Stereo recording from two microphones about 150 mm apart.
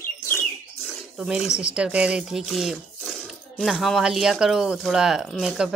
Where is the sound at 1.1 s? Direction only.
5° right (ahead or behind).